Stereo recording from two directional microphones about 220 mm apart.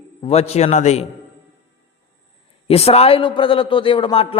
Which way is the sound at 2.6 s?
25° left (ahead or behind).